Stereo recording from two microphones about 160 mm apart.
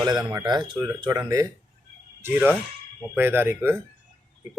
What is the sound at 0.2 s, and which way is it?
Speech, 15° right (ahead or behind).